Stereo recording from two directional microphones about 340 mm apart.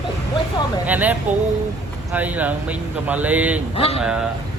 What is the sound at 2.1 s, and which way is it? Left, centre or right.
Speech, centre.